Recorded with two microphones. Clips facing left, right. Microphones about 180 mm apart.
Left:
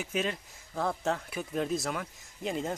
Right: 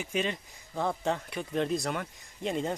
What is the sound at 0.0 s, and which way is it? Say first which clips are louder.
Speech: right 1 dB; centre (ahead or behind).